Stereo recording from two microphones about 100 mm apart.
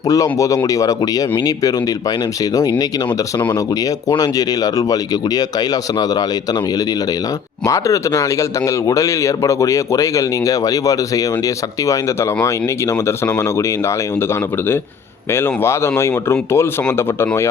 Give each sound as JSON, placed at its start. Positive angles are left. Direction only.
{"t": 0.0, "sound": "speech", "side_deg": 35}